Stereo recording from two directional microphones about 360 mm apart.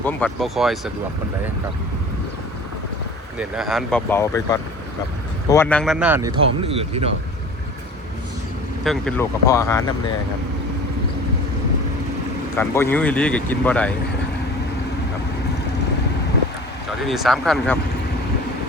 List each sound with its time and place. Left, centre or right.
0.0 s speech: centre
3.3 s speech: centre
8.8 s speech: centre
12.5 s speech: centre
17.0 s speech: centre